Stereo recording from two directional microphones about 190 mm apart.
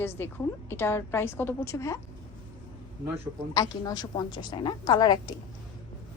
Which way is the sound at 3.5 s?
20° left (ahead or behind).